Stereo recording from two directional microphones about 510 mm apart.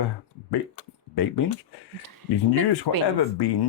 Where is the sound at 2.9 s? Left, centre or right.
Left.